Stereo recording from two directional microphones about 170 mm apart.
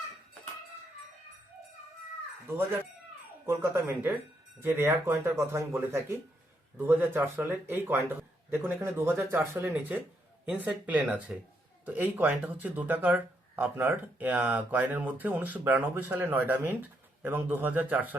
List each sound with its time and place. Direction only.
3.4 s speech: 15° right (ahead or behind)